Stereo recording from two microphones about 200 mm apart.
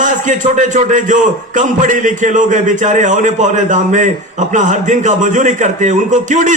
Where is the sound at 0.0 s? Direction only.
40° right (ahead or behind).